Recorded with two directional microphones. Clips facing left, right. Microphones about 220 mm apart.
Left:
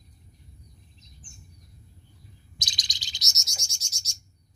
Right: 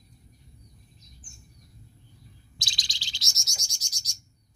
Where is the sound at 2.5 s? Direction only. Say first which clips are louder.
Even; 20° left (ahead or behind).